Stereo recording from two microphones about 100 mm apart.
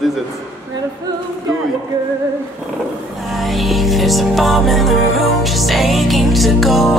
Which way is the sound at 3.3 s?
Centre (ahead or behind).